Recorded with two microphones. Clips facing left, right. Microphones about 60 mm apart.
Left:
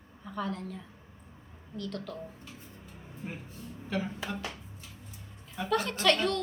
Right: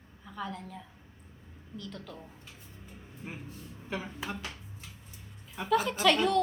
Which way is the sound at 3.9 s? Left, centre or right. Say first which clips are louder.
Left 4 dB; centre.